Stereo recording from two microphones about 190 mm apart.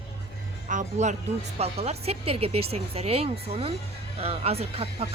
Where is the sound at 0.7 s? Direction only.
40° right (ahead or behind).